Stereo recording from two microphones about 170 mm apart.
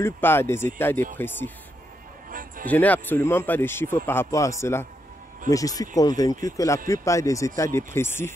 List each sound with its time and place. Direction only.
0.0 s speech: 15° left (ahead or behind)
2.6 s speech: 10° left (ahead or behind)